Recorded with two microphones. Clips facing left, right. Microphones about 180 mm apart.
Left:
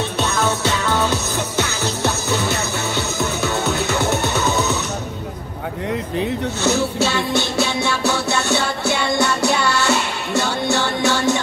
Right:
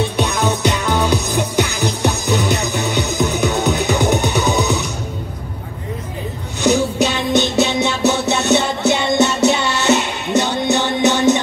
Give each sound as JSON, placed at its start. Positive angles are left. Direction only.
{"t": 0.0, "sound": "music", "side_deg": -15}
{"t": 6.6, "sound": "music", "side_deg": -15}